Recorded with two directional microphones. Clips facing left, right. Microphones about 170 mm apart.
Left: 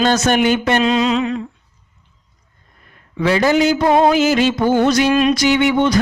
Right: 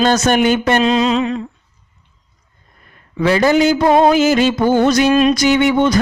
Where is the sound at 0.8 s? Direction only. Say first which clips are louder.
Right 1 dB; 30° right (ahead or behind).